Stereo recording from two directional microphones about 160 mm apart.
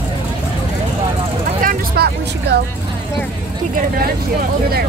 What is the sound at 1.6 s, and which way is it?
Vehicle, 65° right (ahead or behind).